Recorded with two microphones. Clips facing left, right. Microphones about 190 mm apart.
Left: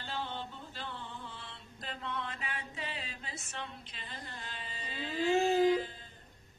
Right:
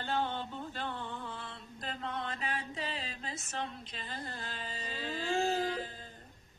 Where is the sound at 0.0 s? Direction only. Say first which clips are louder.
Right 5 dB; 50° right (ahead or behind).